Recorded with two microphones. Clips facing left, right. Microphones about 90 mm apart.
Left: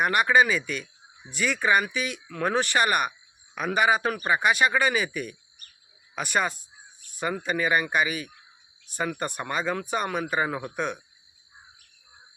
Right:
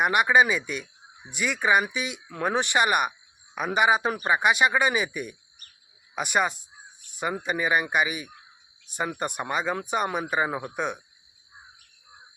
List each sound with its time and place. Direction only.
0.0 s speech: 15° right (ahead or behind)